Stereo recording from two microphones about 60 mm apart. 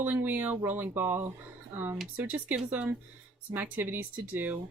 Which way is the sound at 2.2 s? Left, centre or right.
Right.